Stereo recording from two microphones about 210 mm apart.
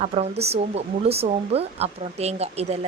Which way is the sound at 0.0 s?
30° right (ahead or behind).